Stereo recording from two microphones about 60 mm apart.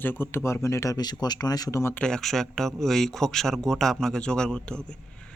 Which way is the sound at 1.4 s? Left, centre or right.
Left.